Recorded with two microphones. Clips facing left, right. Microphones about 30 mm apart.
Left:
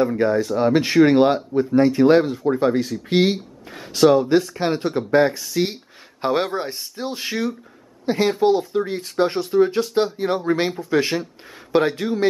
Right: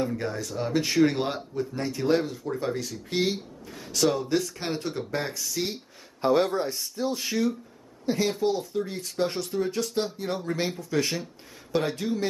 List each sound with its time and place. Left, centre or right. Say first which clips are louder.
0.0 s speech: left 11 dB; left